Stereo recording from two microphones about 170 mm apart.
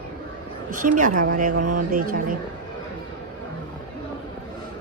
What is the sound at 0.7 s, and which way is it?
A woman's voice, 50° right (ahead or behind).